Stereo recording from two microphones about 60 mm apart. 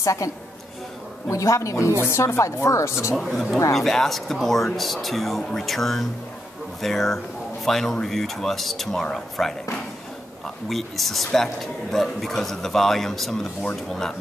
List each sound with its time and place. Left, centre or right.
0.0 s speech: left
1.3 s speech: left
2.0 s speech: left
3.2 s a man's voice: centre
10.7 s a man's voice: centre